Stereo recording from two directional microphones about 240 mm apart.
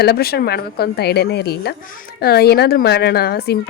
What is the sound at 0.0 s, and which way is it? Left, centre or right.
A woman's voice, left.